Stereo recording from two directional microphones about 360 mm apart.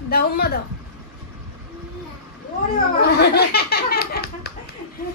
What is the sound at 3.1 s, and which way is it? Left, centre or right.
Laughter, left.